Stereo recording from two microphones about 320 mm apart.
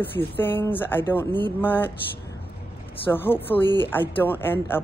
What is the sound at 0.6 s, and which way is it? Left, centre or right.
Speech, centre.